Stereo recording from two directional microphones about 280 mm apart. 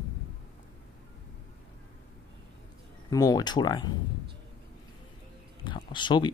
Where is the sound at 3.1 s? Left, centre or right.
Centre.